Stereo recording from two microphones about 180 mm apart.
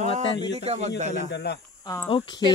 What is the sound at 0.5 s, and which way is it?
Speech, 35° right (ahead or behind).